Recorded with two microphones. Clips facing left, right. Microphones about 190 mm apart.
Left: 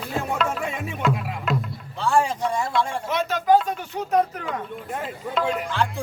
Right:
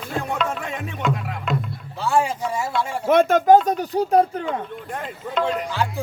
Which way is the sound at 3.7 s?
35° right (ahead or behind).